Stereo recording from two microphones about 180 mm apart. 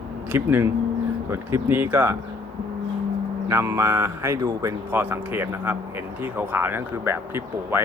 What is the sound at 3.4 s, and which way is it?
Speech, 15° right (ahead or behind).